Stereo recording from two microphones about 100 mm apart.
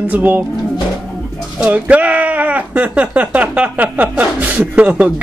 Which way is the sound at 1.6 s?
15° right (ahead or behind).